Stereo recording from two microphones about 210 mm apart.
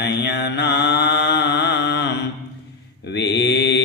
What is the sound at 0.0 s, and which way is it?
Mantra, 55° left (ahead or behind).